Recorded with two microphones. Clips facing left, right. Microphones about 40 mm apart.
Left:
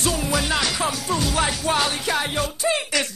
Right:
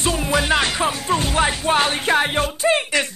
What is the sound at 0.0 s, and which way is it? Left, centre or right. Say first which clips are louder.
Music: right 3 dB; right.